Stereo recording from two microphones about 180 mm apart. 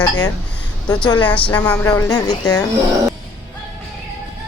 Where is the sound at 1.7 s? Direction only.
15° left (ahead or behind).